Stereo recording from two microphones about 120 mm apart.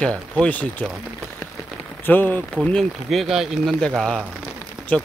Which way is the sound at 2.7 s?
5° left (ahead or behind).